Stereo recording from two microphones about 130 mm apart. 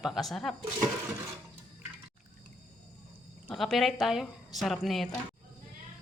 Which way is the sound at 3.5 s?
5° left (ahead or behind).